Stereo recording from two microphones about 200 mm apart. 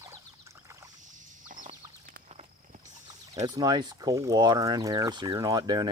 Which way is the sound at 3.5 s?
20° right (ahead or behind).